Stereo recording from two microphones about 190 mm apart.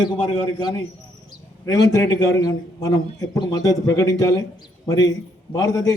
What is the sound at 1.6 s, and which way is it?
A man's voice, 20° left (ahead or behind).